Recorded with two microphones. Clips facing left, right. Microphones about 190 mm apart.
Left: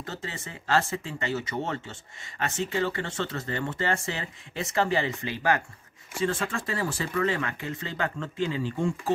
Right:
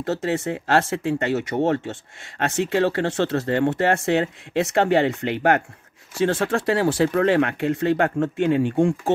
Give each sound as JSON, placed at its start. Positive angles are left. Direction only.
{"t": 0.0, "sound": "speech", "side_deg": -70}
{"t": 6.1, "sound": "speech", "side_deg": -75}